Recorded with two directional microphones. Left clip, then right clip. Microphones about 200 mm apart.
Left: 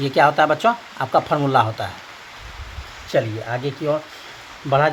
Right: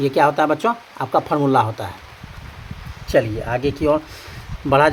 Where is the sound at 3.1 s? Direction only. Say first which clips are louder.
Right 3 dB; 25° right (ahead or behind).